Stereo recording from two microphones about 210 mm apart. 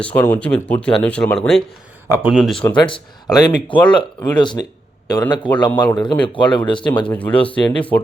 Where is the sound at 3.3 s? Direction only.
20° left (ahead or behind).